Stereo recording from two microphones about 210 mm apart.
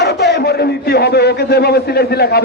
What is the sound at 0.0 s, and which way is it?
Speech, 50° left (ahead or behind).